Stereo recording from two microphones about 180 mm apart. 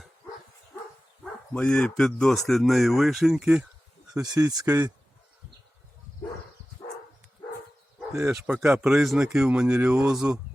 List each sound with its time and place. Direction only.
1.2 s speech: 5° left (ahead or behind)
4.1 s speech: 20° right (ahead or behind)
8.3 s speech: 10° right (ahead or behind)